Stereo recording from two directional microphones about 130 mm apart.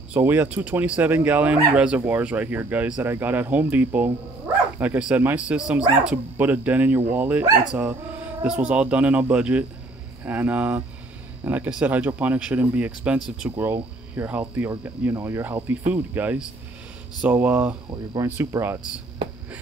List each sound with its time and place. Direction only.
0.1 s speech: 15° right (ahead or behind)
18.1 s speech: 25° right (ahead or behind)